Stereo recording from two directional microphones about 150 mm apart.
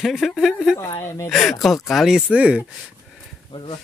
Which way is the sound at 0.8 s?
20° left (ahead or behind).